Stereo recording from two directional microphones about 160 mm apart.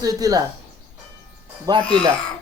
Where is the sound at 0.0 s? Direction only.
20° right (ahead or behind).